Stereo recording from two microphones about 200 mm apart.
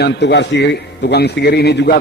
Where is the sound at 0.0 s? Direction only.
60° left (ahead or behind).